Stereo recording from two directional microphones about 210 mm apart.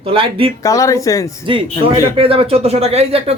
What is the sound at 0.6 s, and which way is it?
Speech, 15° left (ahead or behind).